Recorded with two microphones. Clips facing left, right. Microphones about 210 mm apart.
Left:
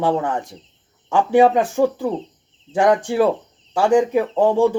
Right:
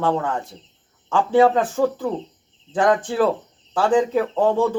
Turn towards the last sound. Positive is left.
turn(degrees=15)  # may be behind; listen again after turning